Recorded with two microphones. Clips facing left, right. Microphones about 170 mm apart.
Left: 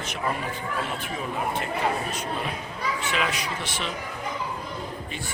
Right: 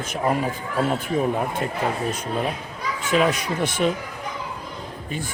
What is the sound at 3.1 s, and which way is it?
Speech, 45° right (ahead or behind).